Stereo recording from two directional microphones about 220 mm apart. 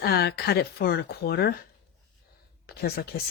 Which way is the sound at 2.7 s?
45° left (ahead or behind).